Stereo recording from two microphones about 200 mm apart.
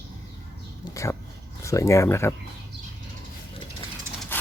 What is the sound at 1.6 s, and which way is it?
Speech, 15° left (ahead or behind).